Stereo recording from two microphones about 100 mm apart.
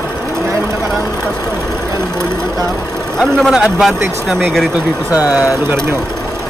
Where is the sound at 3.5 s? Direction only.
10° right (ahead or behind).